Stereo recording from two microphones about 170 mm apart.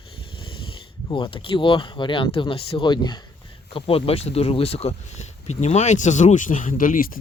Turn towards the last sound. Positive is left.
turn(degrees=55)  # may be behind; listen again after turning